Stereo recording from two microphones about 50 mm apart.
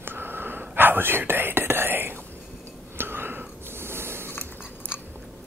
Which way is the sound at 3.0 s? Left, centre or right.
Right.